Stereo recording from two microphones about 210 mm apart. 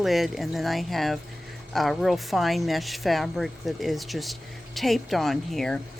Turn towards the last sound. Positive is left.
turn(degrees=0)  # may be behind; listen again after turning